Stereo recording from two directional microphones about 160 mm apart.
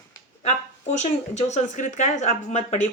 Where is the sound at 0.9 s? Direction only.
45° left (ahead or behind).